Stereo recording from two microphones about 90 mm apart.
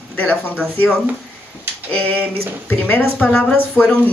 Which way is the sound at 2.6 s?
20° left (ahead or behind).